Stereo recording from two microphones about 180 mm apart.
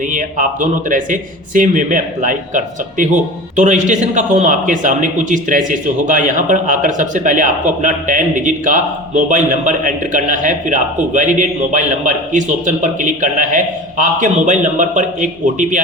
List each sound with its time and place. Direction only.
0.1 s a man's voice: 50° right (ahead or behind)